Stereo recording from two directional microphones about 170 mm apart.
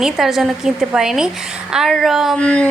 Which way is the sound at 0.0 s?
Centre (ahead or behind).